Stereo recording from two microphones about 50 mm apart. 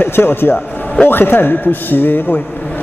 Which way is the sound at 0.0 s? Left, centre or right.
Left.